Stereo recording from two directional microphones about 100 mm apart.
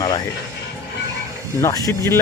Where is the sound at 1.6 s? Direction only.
30° left (ahead or behind).